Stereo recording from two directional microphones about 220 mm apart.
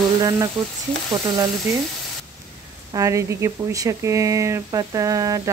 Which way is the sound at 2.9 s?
15° right (ahead or behind).